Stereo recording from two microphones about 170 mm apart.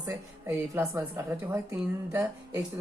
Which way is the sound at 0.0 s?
15° right (ahead or behind).